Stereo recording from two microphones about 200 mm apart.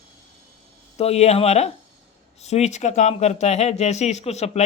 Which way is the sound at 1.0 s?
30° left (ahead or behind).